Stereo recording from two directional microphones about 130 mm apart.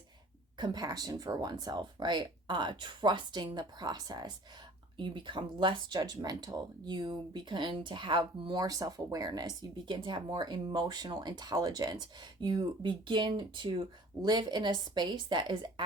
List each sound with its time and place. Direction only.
0.6 s speech: 30° right (ahead or behind)